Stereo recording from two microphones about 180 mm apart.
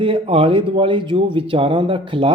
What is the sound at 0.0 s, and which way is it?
Speech, 30° right (ahead or behind).